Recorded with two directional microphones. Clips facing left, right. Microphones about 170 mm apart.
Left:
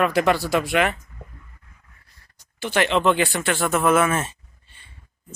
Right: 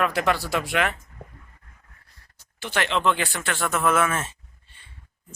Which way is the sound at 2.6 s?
10° left (ahead or behind).